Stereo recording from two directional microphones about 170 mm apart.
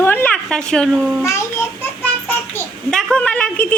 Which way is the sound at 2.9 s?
5° left (ahead or behind).